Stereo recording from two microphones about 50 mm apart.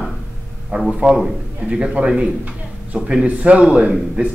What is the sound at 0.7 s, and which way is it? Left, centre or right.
A man's voice, centre.